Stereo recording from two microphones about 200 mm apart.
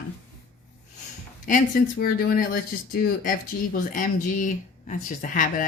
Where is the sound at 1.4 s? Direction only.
45° left (ahead or behind).